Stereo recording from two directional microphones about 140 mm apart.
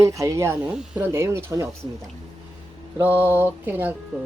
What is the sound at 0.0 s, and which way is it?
Speech, 20° right (ahead or behind).